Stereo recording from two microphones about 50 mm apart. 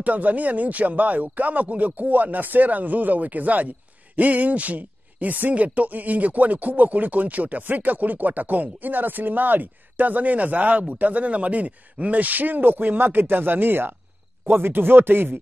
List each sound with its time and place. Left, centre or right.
0.0 s speech: right